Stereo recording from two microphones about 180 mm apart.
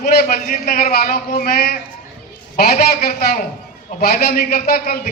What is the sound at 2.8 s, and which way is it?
A man's voice, 60° left (ahead or behind).